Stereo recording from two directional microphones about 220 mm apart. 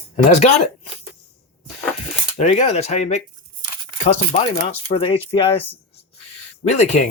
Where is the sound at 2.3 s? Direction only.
30° left (ahead or behind).